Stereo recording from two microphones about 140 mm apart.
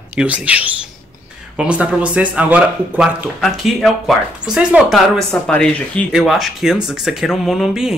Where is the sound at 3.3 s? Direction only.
Centre (ahead or behind).